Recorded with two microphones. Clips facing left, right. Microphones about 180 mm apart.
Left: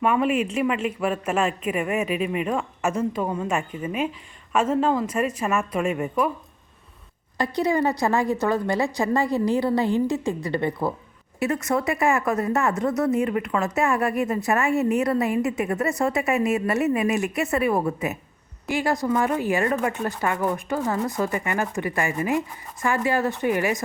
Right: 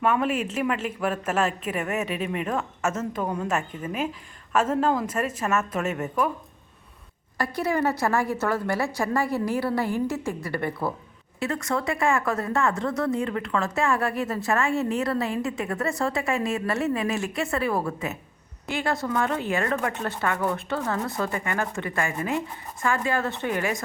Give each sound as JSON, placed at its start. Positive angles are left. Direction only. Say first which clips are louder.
{"t": 0.0, "sound": "a woman's voice", "louder": "left 3 dB", "side_deg": 0}
{"t": 1.4, "sound": "speech", "louder": "left 2 dB", "side_deg": 0}
{"t": 1.8, "sound": "a woman's voice", "louder": "left 3 dB", "side_deg": 10}
{"t": 4.8, "sound": "a woman's voice", "louder": "left 2 dB", "side_deg": -5}
{"t": 7.3, "sound": "a woman's voice", "louder": "left 3 dB", "side_deg": 20}